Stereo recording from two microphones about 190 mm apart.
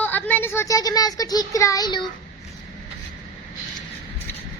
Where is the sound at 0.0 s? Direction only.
10° left (ahead or behind).